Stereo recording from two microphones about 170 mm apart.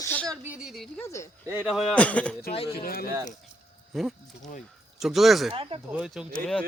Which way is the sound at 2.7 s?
60° left (ahead or behind).